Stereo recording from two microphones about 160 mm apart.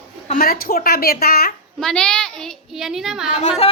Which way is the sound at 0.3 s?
65° left (ahead or behind).